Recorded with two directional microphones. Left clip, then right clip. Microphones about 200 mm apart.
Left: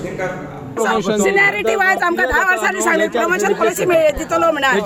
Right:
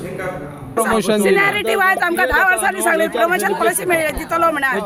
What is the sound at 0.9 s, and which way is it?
Speech, 50° right (ahead or behind).